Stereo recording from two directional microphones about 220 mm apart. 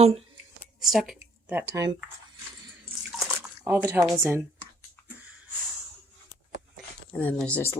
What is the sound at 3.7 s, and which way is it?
Speech, 10° right (ahead or behind).